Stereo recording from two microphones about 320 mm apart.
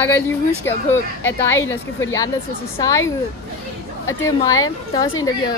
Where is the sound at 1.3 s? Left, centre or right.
Centre.